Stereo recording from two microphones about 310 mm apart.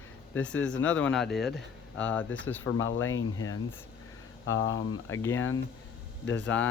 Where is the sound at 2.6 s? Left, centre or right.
Left.